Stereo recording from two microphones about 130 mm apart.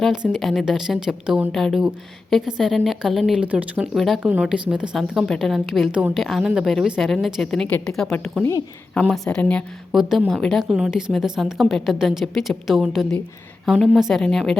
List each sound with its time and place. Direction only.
0.0 s a woman's voice: 5° right (ahead or behind)
3.9 s a woman's voice: centre (ahead or behind)
9.9 s a woman's voice: centre (ahead or behind)